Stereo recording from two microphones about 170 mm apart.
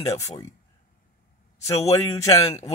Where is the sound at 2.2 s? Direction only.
20° left (ahead or behind).